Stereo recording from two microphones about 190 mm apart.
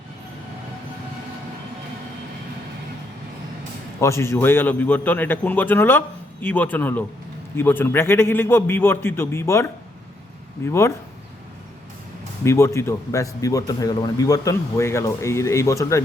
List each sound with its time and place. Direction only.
4.0 s a man's voice: 15° left (ahead or behind)
12.5 s a man's voice: 15° left (ahead or behind)